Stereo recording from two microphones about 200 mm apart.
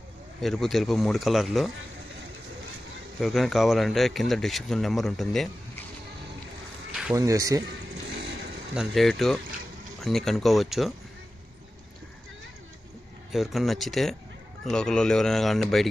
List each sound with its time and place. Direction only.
0.4 s speech: centre (ahead or behind)
3.2 s speech: centre (ahead or behind)
6.9 s a sound: 5° right (ahead or behind)
7.2 s speech: 15° right (ahead or behind)
8.7 s speech: centre (ahead or behind)
13.3 s speech: centre (ahead or behind)